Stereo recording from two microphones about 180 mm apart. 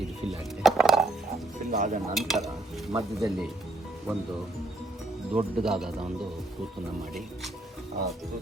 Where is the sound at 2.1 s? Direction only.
Centre (ahead or behind).